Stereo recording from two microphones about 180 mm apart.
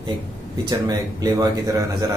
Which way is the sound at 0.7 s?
20° right (ahead or behind).